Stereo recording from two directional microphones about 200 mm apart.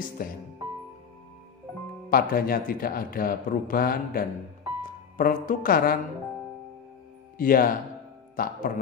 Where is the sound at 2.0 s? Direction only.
45° left (ahead or behind).